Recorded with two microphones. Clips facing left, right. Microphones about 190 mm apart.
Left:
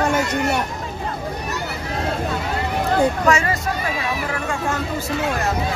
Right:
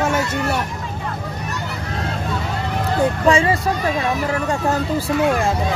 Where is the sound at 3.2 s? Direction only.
30° right (ahead or behind).